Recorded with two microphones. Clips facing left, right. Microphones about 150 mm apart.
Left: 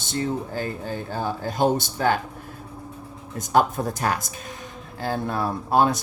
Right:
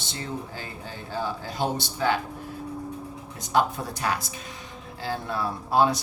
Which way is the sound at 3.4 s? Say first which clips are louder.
Left 4 dB; 50° left (ahead or behind).